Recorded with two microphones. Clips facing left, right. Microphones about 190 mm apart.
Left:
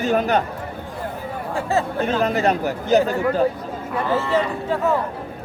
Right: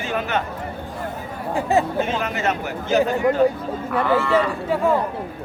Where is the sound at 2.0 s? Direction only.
35° left (ahead or behind).